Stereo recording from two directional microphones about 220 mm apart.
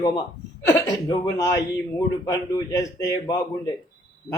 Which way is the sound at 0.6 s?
15° left (ahead or behind).